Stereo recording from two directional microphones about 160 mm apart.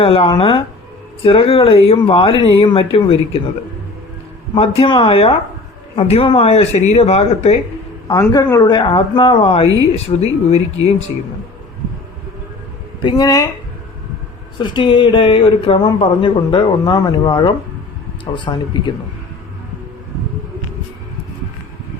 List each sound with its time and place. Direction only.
0.0 s speech: 35° left (ahead or behind)
4.8 s speech: 30° left (ahead or behind)
8.0 s speech: 20° left (ahead or behind); by 10.9 s 40° left (ahead or behind)
13.0 s speech: 30° left (ahead or behind)
14.6 s speech: 30° left (ahead or behind)